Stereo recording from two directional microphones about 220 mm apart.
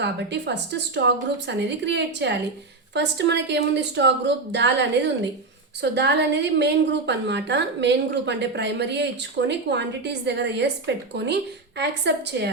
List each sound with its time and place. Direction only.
0.0 s a woman's voice: 50° right (ahead or behind)